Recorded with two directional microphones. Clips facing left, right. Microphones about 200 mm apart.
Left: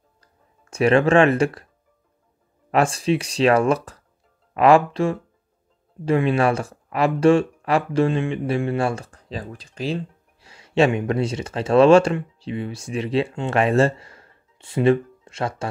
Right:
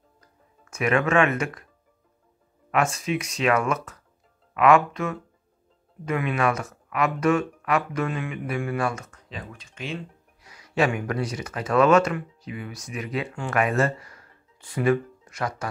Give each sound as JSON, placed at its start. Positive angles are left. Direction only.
{"t": 0.2, "sound": "music", "side_deg": 30}
{"t": 2.7, "sound": "speech", "side_deg": 30}